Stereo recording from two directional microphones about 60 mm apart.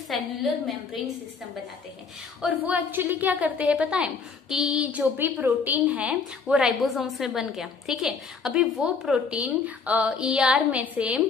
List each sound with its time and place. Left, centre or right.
0.1 s a woman's voice: centre
2.6 s a woman's voice: right
3.7 s a sound: centre
4.9 s a woman's voice: right
6.8 s a woman's voice: centre
9.3 s a woman's voice: right